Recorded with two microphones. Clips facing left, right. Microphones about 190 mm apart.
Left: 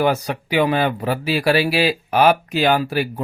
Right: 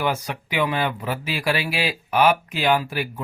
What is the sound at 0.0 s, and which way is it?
Speech, 40° left (ahead or behind).